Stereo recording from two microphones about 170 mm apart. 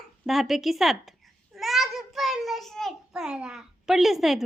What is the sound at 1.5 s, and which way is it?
Child singing, centre (ahead or behind).